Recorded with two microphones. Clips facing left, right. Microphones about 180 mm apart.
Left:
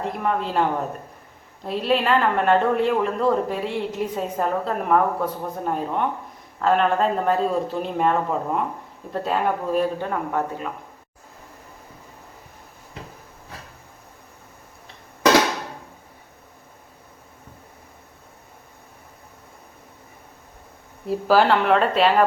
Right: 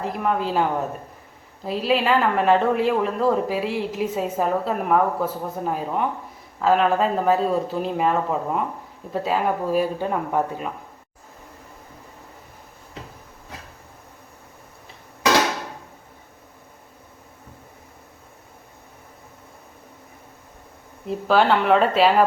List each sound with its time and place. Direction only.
0.0 s a woman's voice: centre (ahead or behind)
10.0 s speech: 15° right (ahead or behind)
21.1 s a woman's voice: 5° left (ahead or behind)